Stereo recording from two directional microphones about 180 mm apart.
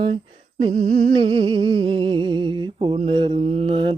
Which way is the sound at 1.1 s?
25° right (ahead or behind).